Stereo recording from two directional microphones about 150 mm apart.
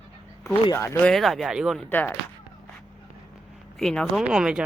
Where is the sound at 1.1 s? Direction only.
Centre (ahead or behind).